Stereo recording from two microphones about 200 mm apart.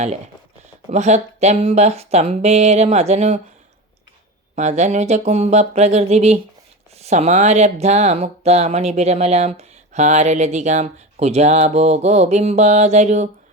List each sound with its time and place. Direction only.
0.9 s speech: 35° right (ahead or behind)
4.5 s speech: 35° right (ahead or behind)